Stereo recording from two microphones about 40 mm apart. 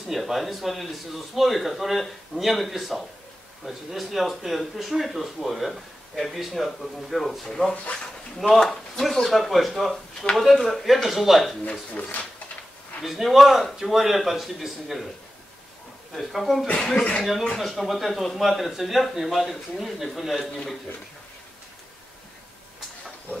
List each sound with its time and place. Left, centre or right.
0.1 s speech: centre
7.7 s speech: left
8.4 s speech: centre
11.9 s speech: left
13.0 s speech: centre
16.2 s speech: centre